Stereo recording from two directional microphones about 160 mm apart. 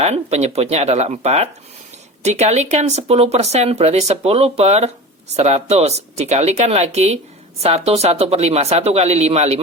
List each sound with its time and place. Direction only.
0.0 s speech: 40° right (ahead or behind)